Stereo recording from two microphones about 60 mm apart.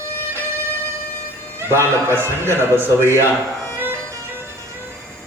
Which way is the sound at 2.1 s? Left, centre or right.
Right.